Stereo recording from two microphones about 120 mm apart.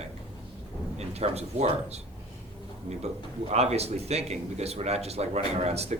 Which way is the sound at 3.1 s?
65° right (ahead or behind).